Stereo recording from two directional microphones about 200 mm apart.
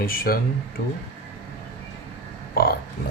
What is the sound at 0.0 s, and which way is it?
Speech, 45° left (ahead or behind).